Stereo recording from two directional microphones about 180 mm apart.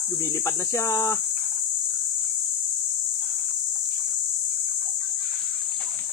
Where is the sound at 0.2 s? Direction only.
15° left (ahead or behind).